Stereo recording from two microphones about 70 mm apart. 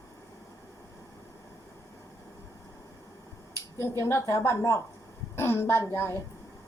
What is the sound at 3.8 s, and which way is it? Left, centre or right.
A woman's voice, left.